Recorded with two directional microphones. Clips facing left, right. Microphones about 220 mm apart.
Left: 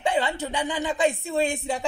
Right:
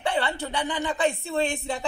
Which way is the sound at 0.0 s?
15° left (ahead or behind).